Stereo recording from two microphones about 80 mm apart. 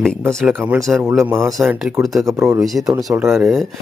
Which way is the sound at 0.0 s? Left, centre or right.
Centre.